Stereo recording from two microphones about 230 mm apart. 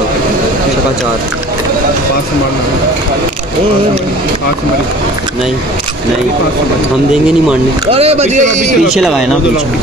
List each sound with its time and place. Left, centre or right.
7.9 s speech: right
8.9 s speech: centre